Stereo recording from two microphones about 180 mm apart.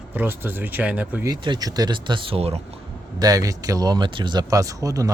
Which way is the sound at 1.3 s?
20° right (ahead or behind).